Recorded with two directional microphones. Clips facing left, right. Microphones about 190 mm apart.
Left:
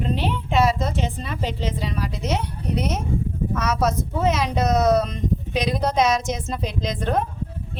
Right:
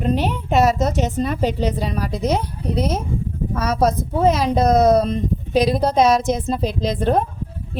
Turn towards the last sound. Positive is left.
turn(degrees=-30)  # may be behind; listen again after turning